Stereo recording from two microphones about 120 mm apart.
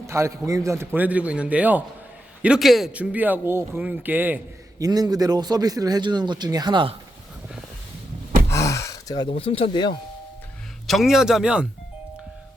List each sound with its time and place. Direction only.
0.1 s a man's voice: 25° right (ahead or behind)
0.9 s a man's voice: 10° right (ahead or behind)
2.9 s a man's voice: 10° right (ahead or behind)
4.8 s a man's voice: 35° right (ahead or behind)
8.4 s gasp: 25° left (ahead or behind)
9.4 s speech: 50° left (ahead or behind)
10.8 s speech: centre (ahead or behind)